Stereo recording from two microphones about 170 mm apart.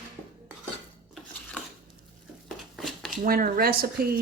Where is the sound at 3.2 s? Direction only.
55° right (ahead or behind).